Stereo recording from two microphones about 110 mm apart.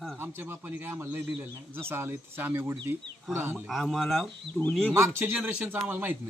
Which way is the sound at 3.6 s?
Centre (ahead or behind).